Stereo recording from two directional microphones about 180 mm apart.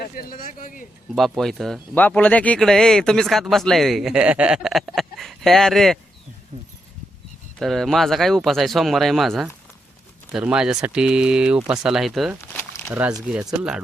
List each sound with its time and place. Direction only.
0.0 s speech: 55° left (ahead or behind)
1.1 s speech: centre (ahead or behind)
7.6 s speech: centre (ahead or behind)
12.5 s a sound: 10° left (ahead or behind)
12.9 s speech: 10° right (ahead or behind)